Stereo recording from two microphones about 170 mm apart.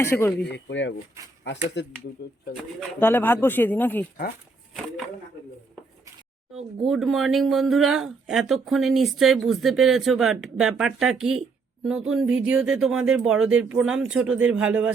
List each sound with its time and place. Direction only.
0.0 s speech: 15° left (ahead or behind)
0.5 s speech: 90° left
3.0 s speech: 10° left (ahead or behind)
6.8 s speech: centre (ahead or behind)